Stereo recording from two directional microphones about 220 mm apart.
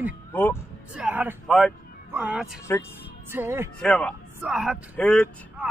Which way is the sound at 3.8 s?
5° left (ahead or behind).